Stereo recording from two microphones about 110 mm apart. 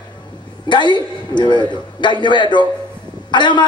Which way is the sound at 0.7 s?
45° left (ahead or behind).